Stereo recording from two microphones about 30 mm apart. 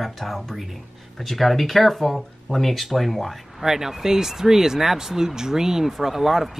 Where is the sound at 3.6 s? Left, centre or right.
Centre.